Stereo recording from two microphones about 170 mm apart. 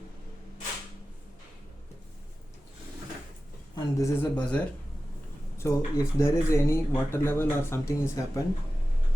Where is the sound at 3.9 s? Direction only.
15° left (ahead or behind).